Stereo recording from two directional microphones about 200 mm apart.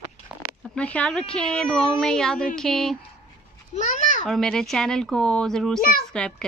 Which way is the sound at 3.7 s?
35° left (ahead or behind).